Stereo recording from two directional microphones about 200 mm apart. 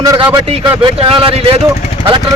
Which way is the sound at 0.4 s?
30° right (ahead or behind).